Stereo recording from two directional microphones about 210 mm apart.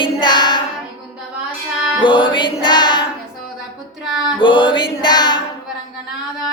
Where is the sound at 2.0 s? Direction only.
25° left (ahead or behind).